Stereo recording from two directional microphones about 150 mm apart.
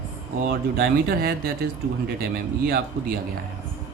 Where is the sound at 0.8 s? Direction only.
90° right.